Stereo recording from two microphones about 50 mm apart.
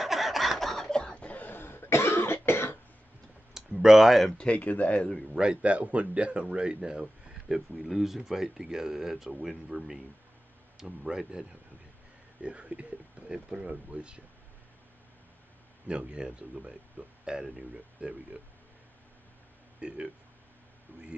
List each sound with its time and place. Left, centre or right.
0.0 s a sound: centre
0.9 s cough: left
1.6 s cough: left
3.5 s a sound: centre
4.4 s speech: left
5.3 s speech: centre
10.9 s speech: centre
12.4 s speech: right
15.9 s speech: centre
19.8 s speech: right